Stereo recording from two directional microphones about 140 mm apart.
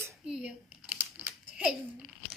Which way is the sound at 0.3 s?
5° right (ahead or behind).